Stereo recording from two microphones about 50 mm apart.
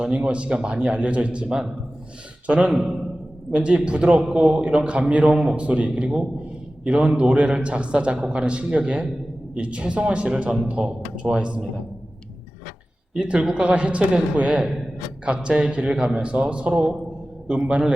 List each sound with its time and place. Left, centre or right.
0.0 s a man's voice: centre
3.5 s speech: right
4.2 s a man's voice: centre
4.7 s speech: centre
5.3 s a man's voice: centre
5.5 s speech: right
13.1 s speech: right